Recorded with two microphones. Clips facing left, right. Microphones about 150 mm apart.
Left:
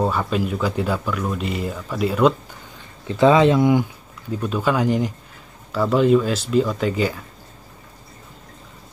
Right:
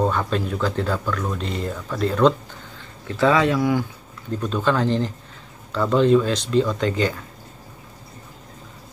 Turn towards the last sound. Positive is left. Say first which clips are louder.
# even
turn(degrees=5)  # may be behind; listen again after turning